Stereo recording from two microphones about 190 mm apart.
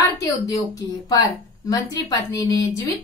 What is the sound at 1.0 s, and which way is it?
A woman's voice, 20° left (ahead or behind).